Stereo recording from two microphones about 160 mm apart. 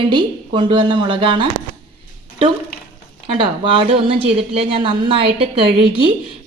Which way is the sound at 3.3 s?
35° right (ahead or behind).